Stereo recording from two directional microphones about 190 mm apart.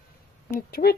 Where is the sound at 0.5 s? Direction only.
55° left (ahead or behind).